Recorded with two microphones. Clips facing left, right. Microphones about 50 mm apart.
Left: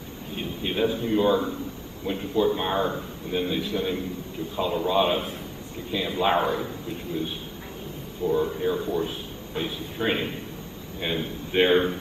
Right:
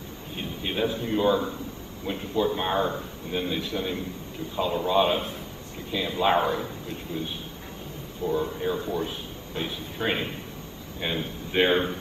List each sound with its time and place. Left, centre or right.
0.4 s a man's voice: centre
8.2 s speech: left
8.5 s a man's voice: centre